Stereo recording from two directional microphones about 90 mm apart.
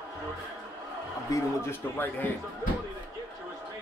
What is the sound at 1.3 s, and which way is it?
A man's voice, 25° left (ahead or behind).